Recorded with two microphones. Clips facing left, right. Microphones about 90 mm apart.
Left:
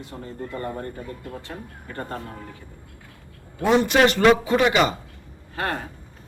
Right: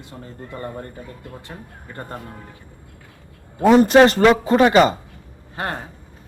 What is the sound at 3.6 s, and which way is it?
A man's voice, 40° right (ahead or behind).